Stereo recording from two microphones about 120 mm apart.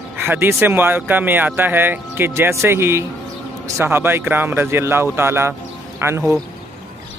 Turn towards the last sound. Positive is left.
turn(degrees=-20)  # may be behind; listen again after turning